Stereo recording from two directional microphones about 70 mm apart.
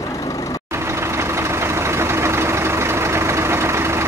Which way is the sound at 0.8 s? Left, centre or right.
Right.